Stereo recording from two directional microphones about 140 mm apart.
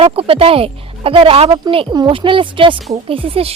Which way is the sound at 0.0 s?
45° right (ahead or behind).